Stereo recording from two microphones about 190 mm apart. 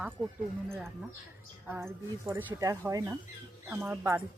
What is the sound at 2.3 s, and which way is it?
Speech, 15° right (ahead or behind).